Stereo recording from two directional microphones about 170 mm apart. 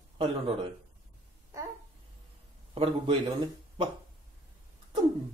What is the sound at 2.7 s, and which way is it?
Speech, 30° right (ahead or behind).